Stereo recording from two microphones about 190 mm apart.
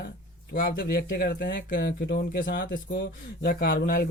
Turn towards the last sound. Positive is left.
turn(degrees=55)  # may be behind; listen again after turning